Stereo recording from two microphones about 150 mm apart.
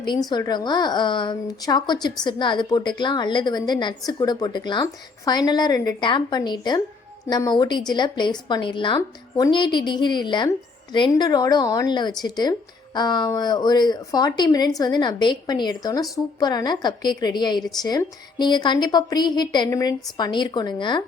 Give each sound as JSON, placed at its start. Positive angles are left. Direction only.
{"t": 0.3, "sound": "a woman's voice", "side_deg": 30}